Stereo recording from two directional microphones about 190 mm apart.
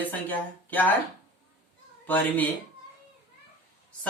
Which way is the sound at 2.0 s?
10° left (ahead or behind).